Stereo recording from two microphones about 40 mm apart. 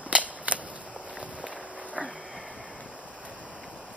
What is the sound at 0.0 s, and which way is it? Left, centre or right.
Cap gun, right.